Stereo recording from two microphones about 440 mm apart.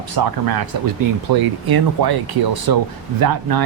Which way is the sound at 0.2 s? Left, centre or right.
Right.